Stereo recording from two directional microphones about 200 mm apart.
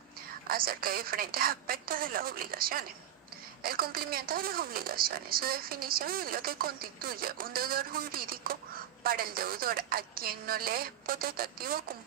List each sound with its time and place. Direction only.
0.4 s a woman's voice: 45° right (ahead or behind)